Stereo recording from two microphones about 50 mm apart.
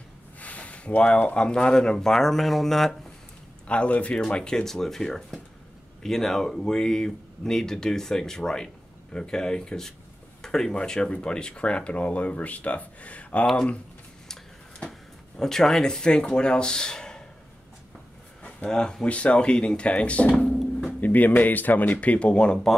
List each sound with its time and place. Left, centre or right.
0.4 s speech: left; by 3.0 s centre
3.6 s speech: left
14.2 s a sound: centre
18.7 s speech: centre
19.0 s speech: left
21.0 s a sound: left
21.4 s speech: left; by 22.7 s centre